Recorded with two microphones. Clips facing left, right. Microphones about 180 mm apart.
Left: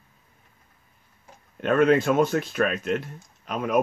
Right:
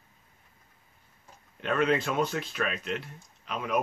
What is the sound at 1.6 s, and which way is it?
Speech, 50° left (ahead or behind).